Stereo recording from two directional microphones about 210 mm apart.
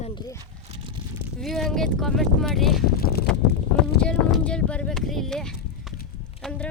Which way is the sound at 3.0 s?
45° left (ahead or behind).